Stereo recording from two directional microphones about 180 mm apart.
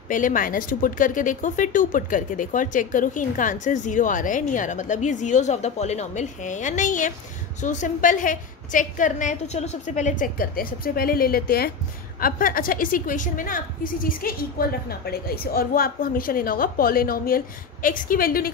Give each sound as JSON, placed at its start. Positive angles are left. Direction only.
{"t": 0.1, "sound": "a woman's voice", "side_deg": 45}